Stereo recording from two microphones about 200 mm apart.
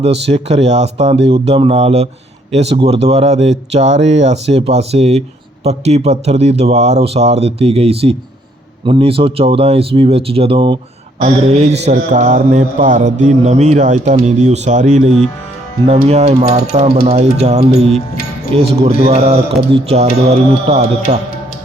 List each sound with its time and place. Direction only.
0.0 s mantra: 30° right (ahead or behind)
8.8 s speech: 25° right (ahead or behind)
11.2 s mantra: 30° right (ahead or behind)